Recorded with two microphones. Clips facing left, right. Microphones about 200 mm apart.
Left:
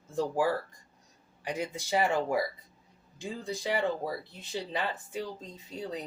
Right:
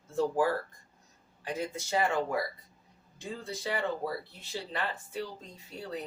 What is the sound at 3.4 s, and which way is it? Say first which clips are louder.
Speech: left 3 dB; 15° left (ahead or behind).